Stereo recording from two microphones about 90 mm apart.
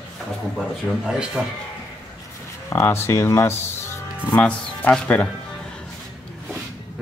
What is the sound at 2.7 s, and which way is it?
Speech, 30° left (ahead or behind).